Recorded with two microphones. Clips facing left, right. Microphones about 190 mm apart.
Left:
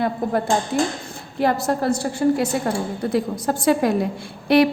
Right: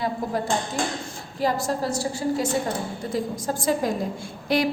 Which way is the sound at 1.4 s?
60° left (ahead or behind).